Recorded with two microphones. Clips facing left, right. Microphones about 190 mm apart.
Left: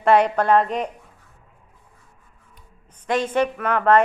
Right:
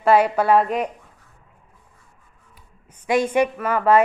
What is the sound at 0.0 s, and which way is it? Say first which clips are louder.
Speech: even; 5° right (ahead or behind).